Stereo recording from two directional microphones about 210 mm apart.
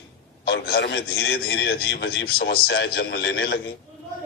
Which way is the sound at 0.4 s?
50° left (ahead or behind).